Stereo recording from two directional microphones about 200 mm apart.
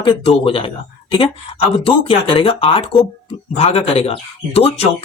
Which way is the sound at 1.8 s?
25° left (ahead or behind).